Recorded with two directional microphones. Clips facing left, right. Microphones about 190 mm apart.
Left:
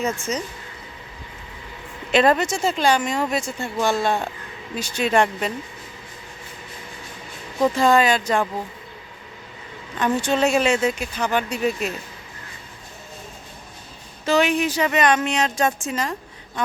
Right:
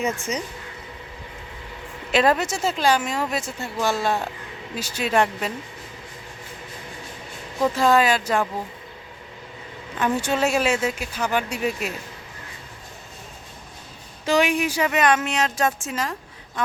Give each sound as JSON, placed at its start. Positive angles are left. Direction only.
{"t": 0.0, "sound": "speech", "side_deg": -15}
{"t": 2.1, "sound": "speech", "side_deg": -5}
{"t": 7.7, "sound": "speech", "side_deg": -5}
{"t": 10.2, "sound": "speech", "side_deg": -10}
{"t": 14.3, "sound": "speech", "side_deg": -10}